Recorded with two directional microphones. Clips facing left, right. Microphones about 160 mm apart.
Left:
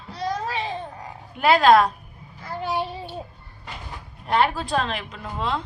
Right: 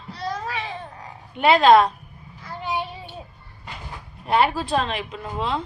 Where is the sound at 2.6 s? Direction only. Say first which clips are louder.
Left 1 dB; 40° left (ahead or behind).